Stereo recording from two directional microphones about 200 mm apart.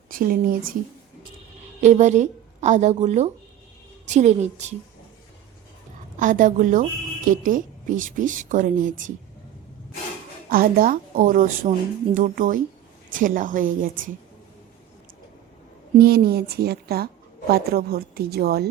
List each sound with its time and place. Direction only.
0.1 s a woman's voice: 45° right (ahead or behind)
1.8 s speech: 35° right (ahead or behind)
6.1 s speech: 40° right (ahead or behind)
10.5 s a woman's voice: 45° right (ahead or behind)
16.0 s a woman's voice: 50° right (ahead or behind)